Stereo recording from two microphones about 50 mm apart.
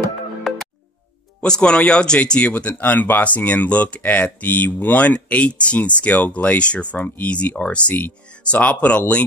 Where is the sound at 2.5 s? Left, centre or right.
Left.